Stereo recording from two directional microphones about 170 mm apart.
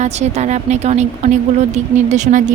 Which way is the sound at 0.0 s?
40° right (ahead or behind).